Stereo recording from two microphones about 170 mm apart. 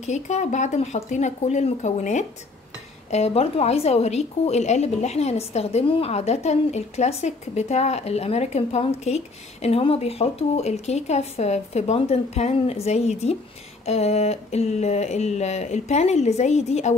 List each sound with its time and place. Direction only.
0.0 s a woman's voice: 45° left (ahead or behind)